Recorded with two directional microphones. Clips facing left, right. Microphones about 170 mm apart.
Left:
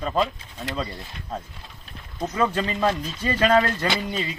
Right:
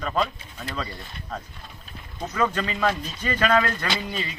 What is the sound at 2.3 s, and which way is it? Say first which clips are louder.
Speech: left 1 dB; 30° left (ahead or behind).